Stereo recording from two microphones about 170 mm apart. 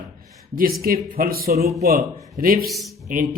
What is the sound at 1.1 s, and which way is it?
Speech, 60° right (ahead or behind).